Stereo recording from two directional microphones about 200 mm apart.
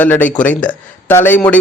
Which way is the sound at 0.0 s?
10° left (ahead or behind).